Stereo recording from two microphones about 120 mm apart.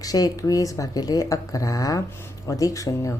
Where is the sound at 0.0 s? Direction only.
30° left (ahead or behind).